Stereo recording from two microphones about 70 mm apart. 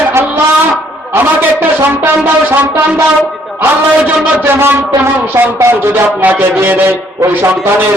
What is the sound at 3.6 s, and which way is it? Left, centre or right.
A man's voice, right.